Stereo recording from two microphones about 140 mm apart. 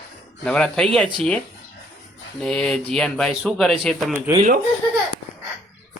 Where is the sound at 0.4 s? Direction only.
5° left (ahead or behind).